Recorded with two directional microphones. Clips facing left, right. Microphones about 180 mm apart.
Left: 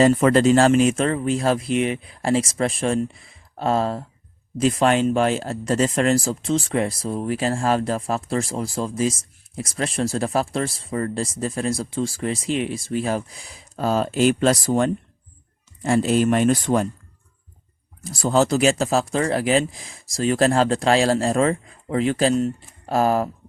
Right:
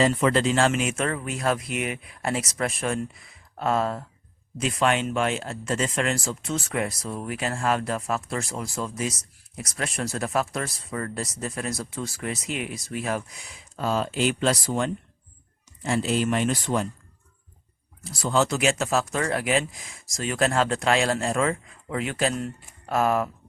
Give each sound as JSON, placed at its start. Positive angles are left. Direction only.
{"t": 0.0, "sound": "speech", "side_deg": 45}
{"t": 18.0, "sound": "speech", "side_deg": 45}